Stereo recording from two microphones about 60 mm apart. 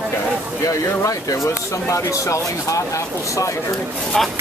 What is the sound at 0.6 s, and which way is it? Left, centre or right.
Speech, left.